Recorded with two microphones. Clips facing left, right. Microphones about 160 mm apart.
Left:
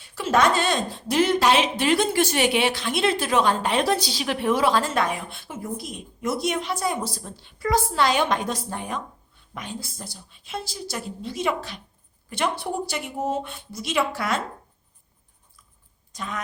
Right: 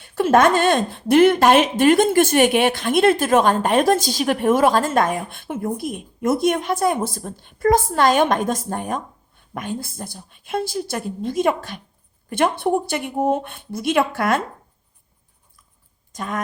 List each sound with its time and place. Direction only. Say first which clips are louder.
0.0 s a woman's voice: right 6 dB; 55° right (ahead or behind)
16.1 s a woman's voice: right 5 dB; 50° right (ahead or behind)